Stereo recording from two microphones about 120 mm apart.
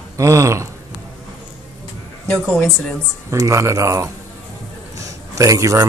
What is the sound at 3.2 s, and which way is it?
Speech, 25° right (ahead or behind).